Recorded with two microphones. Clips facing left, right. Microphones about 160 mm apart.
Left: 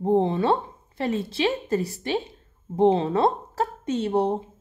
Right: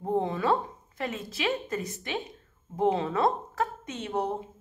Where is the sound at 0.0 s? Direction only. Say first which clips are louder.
Left 6 dB; 25° left (ahead or behind).